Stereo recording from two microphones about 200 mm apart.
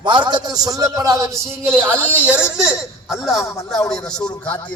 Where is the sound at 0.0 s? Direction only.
25° right (ahead or behind); by 3.4 s centre (ahead or behind).